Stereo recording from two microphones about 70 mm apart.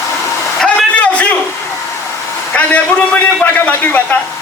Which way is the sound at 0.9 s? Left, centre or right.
Centre.